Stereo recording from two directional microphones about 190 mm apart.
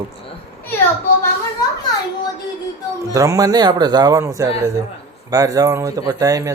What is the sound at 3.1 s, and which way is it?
Speech, 15° right (ahead or behind).